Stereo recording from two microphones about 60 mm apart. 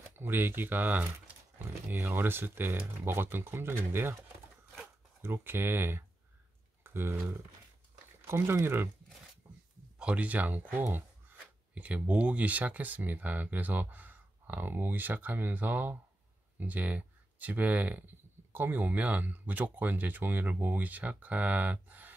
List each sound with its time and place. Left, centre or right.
0.1 s speech: right
5.2 s speech: right
6.8 s a sound: right
8.3 s speech: right
9.9 s speech: right
10.7 s a sound: right
11.8 s speech: right